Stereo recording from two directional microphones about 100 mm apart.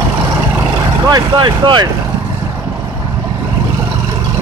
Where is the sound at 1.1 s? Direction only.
50° right (ahead or behind).